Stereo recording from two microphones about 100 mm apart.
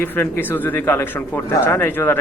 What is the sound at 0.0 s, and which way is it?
Speech, 20° left (ahead or behind).